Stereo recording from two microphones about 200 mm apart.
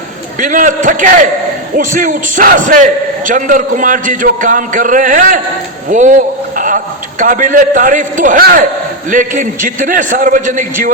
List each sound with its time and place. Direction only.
0.3 s a man's voice: 40° right (ahead or behind)
5.9 s a sound: 40° right (ahead or behind)
7.2 s a man's voice: 40° right (ahead or behind)